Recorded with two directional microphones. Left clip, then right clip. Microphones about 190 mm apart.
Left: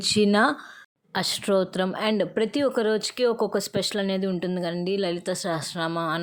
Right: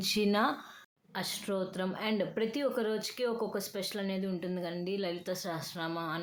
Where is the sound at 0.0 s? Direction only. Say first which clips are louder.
Left 9 dB; 40° left (ahead or behind).